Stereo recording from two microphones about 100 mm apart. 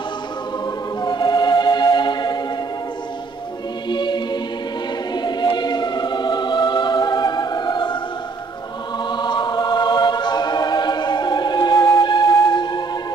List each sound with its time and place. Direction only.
1.0 s music: 45° left (ahead or behind)
3.9 s music: 50° left (ahead or behind)
9.1 s choir: 50° left (ahead or behind)